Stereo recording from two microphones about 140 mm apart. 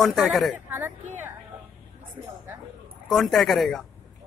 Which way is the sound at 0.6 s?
15° right (ahead or behind).